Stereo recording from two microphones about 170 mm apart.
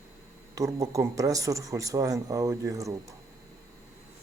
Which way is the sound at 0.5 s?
20° right (ahead or behind).